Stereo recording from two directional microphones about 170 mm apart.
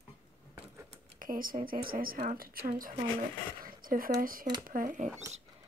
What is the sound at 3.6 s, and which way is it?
Zipper, 55° right (ahead or behind).